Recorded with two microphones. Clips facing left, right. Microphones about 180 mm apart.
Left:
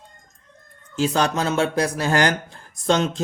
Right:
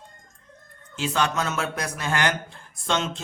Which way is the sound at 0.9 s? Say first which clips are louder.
Left 4 dB; 40° left (ahead or behind).